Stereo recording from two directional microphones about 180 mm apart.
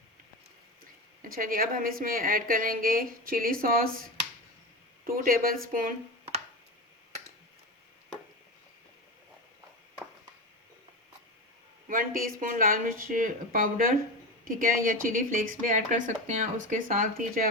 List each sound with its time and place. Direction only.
1.2 s speech: 50° right (ahead or behind)
5.0 s speech: 55° right (ahead or behind)
11.9 s speech: 50° right (ahead or behind)